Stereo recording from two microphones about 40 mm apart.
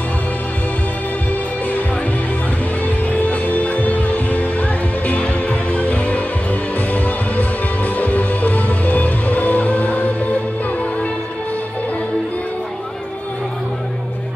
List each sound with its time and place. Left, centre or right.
3.1 s music: left